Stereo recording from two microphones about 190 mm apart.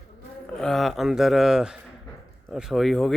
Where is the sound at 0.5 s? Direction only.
5° left (ahead or behind).